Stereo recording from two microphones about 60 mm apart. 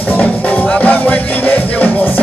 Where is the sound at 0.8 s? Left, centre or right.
Left.